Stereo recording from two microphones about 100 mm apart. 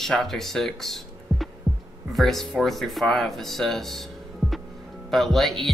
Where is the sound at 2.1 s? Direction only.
Centre (ahead or behind).